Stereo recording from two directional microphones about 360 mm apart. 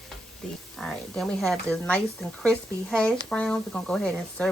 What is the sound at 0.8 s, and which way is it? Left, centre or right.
Speech, centre.